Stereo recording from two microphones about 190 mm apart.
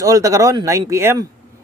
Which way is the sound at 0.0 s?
15° right (ahead or behind).